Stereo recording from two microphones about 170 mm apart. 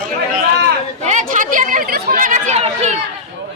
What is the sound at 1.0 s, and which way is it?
Chatter, 45° right (ahead or behind).